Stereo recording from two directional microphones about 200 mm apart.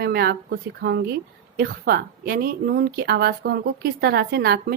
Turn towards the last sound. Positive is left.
turn(degrees=-55)  # may be behind; listen again after turning